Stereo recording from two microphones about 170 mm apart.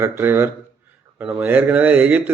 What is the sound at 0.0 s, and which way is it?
A man's voice, 15° right (ahead or behind).